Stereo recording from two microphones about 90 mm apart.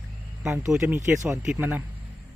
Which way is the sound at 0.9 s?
30° right (ahead or behind).